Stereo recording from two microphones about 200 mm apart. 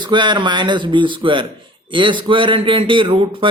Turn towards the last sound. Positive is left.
turn(degrees=-25)  # may be behind; listen again after turning